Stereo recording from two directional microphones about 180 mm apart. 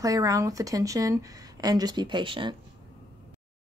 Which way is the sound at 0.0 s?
20° right (ahead or behind).